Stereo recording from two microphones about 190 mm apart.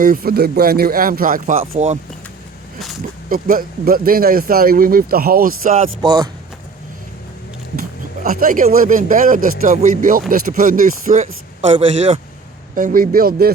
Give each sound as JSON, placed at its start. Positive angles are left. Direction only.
{"t": 0.0, "sound": "speech", "side_deg": -50}
{"t": 3.2, "sound": "speech", "side_deg": -45}
{"t": 6.0, "sound": "speech", "side_deg": -20}
{"t": 8.2, "sound": "speech", "side_deg": -45}
{"t": 12.7, "sound": "speech", "side_deg": -45}